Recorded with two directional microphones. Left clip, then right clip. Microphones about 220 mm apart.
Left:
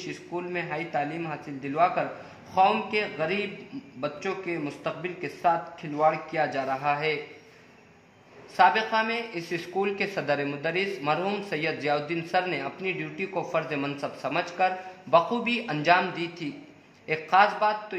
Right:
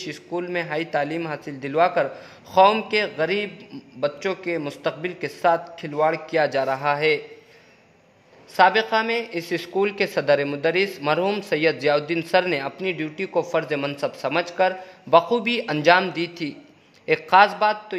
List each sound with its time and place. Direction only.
0.0 s speech: 50° right (ahead or behind)
8.5 s speech: 45° right (ahead or behind)